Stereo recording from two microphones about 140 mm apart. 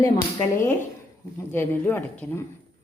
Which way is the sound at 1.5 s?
15° left (ahead or behind).